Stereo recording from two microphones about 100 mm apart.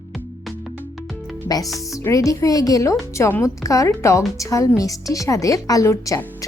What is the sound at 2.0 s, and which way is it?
A woman's voice, 35° left (ahead or behind).